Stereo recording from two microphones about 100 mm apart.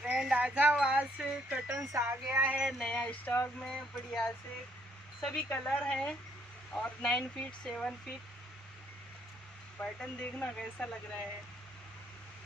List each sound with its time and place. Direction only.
0.0 s a sound: 10° right (ahead or behind)
1.9 s music: 30° right (ahead or behind)
2.2 s music: 15° right (ahead or behind)
2.8 s speech: 10° left (ahead or behind)
9.8 s speech: 10° left (ahead or behind)